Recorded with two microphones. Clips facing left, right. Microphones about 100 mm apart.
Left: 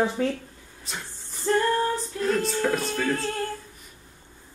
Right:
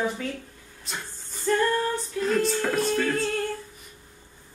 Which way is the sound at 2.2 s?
Centre (ahead or behind).